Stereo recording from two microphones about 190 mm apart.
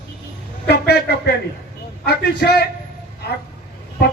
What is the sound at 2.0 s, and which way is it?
Speech, 60° left (ahead or behind).